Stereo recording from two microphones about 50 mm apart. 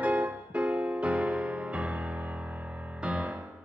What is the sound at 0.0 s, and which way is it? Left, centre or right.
Music, right.